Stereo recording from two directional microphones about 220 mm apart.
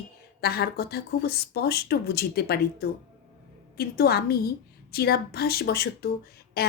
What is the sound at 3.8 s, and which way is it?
Speech, 45° left (ahead or behind).